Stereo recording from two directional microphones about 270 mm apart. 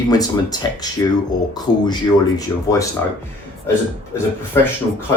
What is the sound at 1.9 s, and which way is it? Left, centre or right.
Speech, centre.